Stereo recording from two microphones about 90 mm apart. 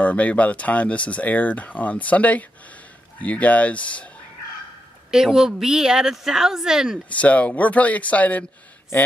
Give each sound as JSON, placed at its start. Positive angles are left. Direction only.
{"t": 0.0, "sound": "speech", "side_deg": 15}
{"t": 5.1, "sound": "a woman's voice", "side_deg": -5}
{"t": 7.1, "sound": "speech", "side_deg": 15}